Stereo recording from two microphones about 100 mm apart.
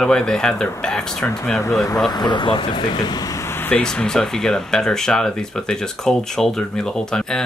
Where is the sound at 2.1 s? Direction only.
45° left (ahead or behind); by 3.8 s 20° left (ahead or behind).